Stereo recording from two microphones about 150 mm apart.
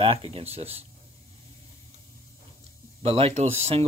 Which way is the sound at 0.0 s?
35° right (ahead or behind).